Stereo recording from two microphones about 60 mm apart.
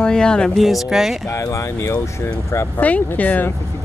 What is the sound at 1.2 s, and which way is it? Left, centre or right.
Speech, left.